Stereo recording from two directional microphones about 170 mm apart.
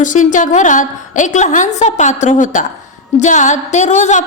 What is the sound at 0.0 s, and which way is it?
A woman's voice, 50° left (ahead or behind).